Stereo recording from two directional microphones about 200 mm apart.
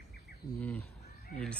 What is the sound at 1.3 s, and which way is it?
Speech, 45° left (ahead or behind).